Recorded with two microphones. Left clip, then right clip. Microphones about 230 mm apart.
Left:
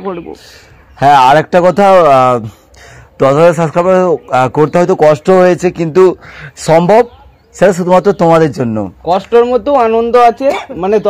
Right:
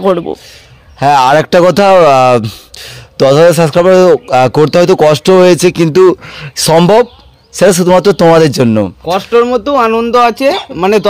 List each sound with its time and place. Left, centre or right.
0.0 s speech: right
1.3 s speech: right
9.0 s speech: centre; by 11.1 s right